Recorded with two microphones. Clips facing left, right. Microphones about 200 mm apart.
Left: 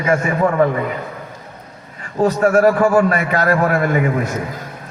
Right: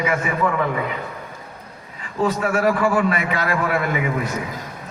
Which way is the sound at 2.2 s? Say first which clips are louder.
Left 7 dB; 45° left (ahead or behind).